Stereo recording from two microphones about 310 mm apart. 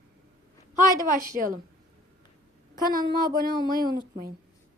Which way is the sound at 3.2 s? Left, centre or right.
Right.